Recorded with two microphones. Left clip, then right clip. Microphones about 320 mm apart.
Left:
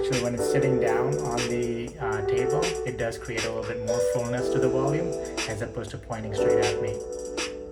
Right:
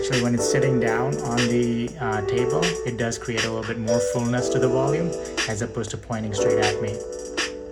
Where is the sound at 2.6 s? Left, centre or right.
Centre.